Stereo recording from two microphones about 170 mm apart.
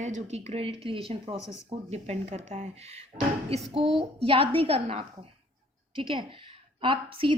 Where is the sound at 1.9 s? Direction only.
40° right (ahead or behind).